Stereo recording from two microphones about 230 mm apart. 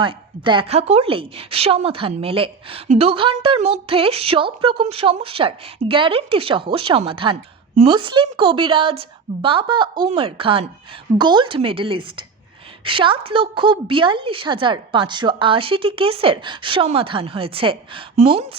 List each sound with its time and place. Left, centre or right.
0.0 s a woman's voice: right